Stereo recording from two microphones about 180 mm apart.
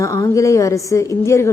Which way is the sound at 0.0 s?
15° left (ahead or behind).